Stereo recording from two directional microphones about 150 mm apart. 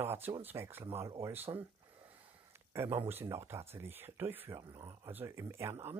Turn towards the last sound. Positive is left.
turn(degrees=-15)  # may be behind; listen again after turning